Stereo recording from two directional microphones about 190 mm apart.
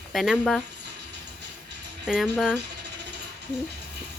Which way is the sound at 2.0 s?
5° right (ahead or behind).